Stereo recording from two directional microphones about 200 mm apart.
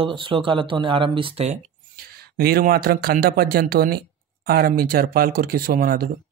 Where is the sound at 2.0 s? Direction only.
50° right (ahead or behind).